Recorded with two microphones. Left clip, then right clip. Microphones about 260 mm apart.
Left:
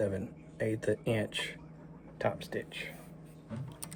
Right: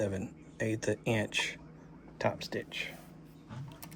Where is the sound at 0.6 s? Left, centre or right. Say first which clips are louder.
Left 1 dB; centre.